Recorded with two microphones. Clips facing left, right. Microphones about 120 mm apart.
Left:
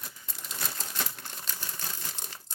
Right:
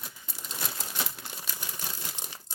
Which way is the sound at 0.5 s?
10° right (ahead or behind).